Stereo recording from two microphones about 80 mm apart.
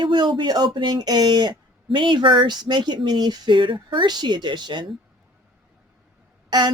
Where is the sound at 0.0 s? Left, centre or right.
Right.